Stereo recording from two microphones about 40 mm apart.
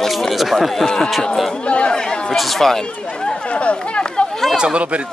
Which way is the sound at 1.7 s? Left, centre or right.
Left.